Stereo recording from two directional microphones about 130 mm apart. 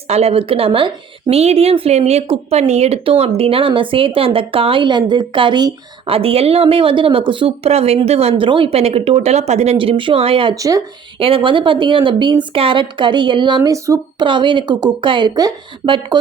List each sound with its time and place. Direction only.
0.1 s a woman's voice: 50° right (ahead or behind); by 6.1 s 35° right (ahead or behind)
6.1 s a woman's voice: 50° right (ahead or behind)
9.7 s a woman's voice: 45° right (ahead or behind)
10.5 s speech: 25° right (ahead or behind)
11.2 s speech: 45° right (ahead or behind)
13.6 s speech: 25° right (ahead or behind)
14.2 s speech: 35° right (ahead or behind)